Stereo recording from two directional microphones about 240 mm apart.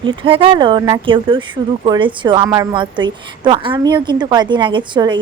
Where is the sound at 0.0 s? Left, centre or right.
Centre.